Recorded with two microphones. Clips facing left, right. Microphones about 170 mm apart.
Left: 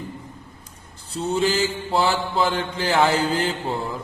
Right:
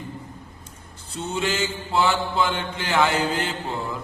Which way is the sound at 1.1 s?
35° left (ahead or behind).